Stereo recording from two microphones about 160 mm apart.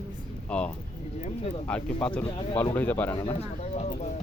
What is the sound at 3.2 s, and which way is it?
Speech, 40° left (ahead or behind).